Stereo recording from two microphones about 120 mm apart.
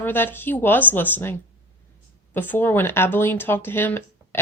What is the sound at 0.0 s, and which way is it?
Speech, 15° left (ahead or behind).